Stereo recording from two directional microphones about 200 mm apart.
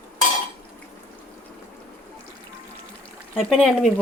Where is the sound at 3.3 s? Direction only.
Centre (ahead or behind).